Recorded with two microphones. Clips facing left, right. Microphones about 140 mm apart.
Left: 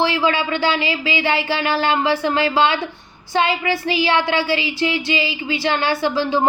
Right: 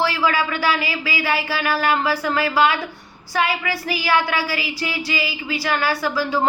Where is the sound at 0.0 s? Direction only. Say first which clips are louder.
Left 2 dB; 25° left (ahead or behind).